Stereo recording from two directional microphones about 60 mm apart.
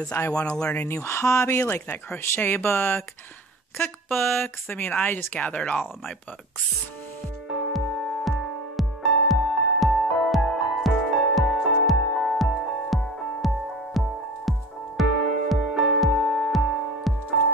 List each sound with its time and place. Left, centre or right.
0.3 s speech: centre
0.9 s speech: left
4.1 s speech: centre
4.4 s speech: left; by 5.9 s centre
7.5 s music: centre